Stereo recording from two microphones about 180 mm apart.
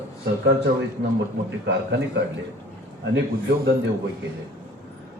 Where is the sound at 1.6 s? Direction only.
75° right (ahead or behind).